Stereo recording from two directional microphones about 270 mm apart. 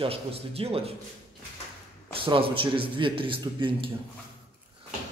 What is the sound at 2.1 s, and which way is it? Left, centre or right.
A man's voice, centre.